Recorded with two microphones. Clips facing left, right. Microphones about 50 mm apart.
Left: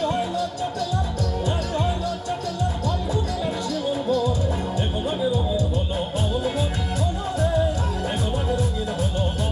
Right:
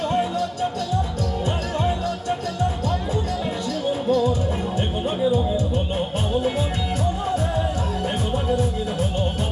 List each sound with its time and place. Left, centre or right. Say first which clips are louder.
0.1 s music: right 2 dB; right
4.1 s music: right 3 dB; right